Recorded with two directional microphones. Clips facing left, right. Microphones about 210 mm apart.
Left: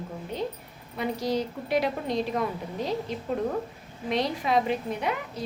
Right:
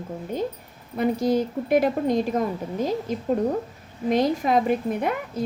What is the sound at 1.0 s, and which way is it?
Speech, 50° right (ahead or behind).